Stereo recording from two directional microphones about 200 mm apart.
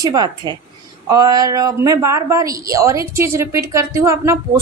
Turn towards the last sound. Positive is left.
turn(degrees=-15)  # may be behind; listen again after turning